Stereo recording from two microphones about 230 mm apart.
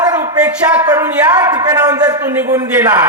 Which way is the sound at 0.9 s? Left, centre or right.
Centre.